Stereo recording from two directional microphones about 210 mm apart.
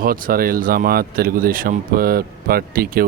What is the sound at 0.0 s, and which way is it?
Speech, 45° right (ahead or behind).